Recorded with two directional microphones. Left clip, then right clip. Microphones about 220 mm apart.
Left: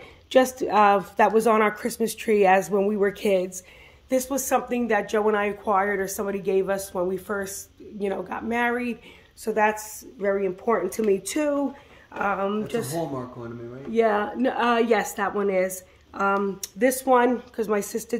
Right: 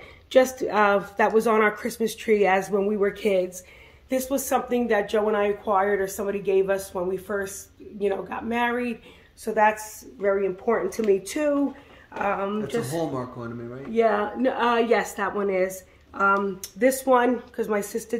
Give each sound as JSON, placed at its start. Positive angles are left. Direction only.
{"t": 0.3, "sound": "speech", "side_deg": 40}
{"t": 13.9, "sound": "speech", "side_deg": 45}